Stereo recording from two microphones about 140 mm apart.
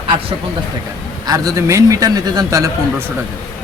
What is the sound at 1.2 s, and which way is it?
A man's voice, 25° right (ahead or behind).